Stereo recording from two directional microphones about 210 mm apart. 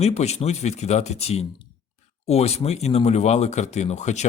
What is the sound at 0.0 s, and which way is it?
Speech, 30° left (ahead or behind).